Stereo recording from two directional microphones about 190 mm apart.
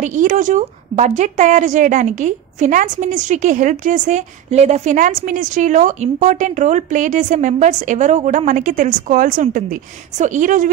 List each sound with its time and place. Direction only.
0.0 s a woman's voice: 45° right (ahead or behind)